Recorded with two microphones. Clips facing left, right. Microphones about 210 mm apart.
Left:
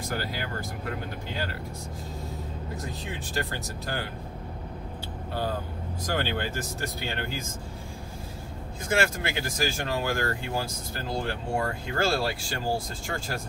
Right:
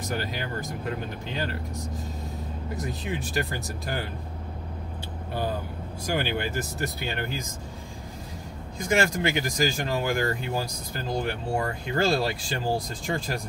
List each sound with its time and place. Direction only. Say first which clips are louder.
0.1 s speech: right 2 dB; 20° right (ahead or behind)
2.8 s speech: right 4 dB; 15° right (ahead or behind)
6.0 s speech: right 2 dB; 10° right (ahead or behind)
8.7 s speech: right 2 dB; 15° right (ahead or behind)